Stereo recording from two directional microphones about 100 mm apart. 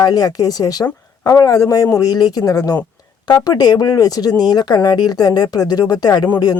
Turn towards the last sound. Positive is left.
turn(degrees=40)  # may be behind; listen again after turning